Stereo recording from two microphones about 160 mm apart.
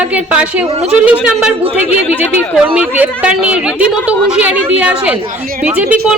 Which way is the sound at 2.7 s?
10° right (ahead or behind).